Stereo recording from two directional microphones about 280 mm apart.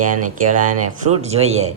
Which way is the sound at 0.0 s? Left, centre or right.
Right.